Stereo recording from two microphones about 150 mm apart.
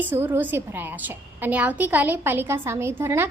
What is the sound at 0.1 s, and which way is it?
A woman's voice, 10° right (ahead or behind).